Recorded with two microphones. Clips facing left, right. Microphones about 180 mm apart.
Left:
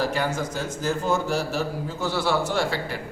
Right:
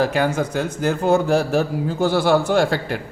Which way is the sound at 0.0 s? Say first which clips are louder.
Right 6 dB; 60° right (ahead or behind).